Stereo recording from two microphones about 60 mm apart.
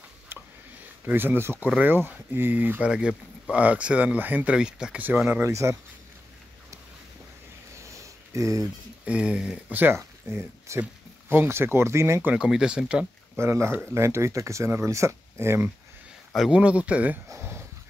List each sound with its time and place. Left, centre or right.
0.3 s a sound: right
1.0 s speech: right
2.9 s speech: centre
4.5 s speech: centre
4.9 s speech: right
5.4 s speech: right
7.7 s a sound: right
9.0 s speech: centre
9.7 s speech: right
9.9 s speech: right
12.4 s speech: centre
13.4 s speech: right
16.4 s speech: right